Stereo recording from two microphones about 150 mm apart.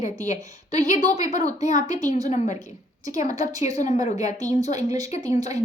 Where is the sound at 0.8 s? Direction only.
50° left (ahead or behind).